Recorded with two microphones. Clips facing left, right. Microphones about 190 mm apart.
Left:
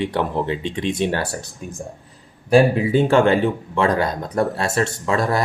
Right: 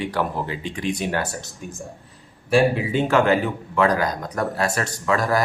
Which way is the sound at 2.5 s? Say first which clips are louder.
Left 4 dB; 35° left (ahead or behind).